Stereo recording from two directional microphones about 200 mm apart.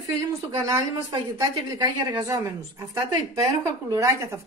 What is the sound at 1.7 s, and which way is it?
A woman's voice, 15° right (ahead or behind).